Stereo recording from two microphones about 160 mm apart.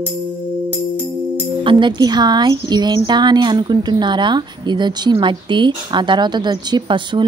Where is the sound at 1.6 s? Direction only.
30° right (ahead or behind).